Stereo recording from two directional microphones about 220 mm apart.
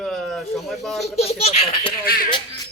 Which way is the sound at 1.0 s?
30° left (ahead or behind).